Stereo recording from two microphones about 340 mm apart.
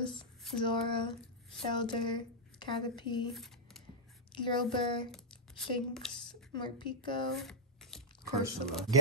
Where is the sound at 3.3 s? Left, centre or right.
Centre.